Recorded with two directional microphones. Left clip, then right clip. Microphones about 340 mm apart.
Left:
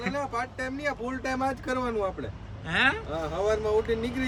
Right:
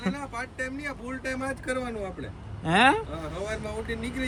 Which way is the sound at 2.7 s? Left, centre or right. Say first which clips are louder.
Right 4 dB; centre.